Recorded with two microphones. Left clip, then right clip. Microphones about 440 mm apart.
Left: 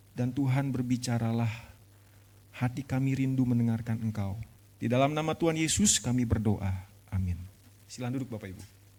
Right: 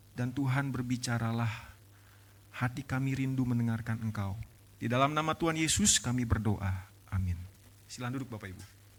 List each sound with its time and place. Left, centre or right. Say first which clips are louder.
0.2 s a man's voice: left 2 dB; right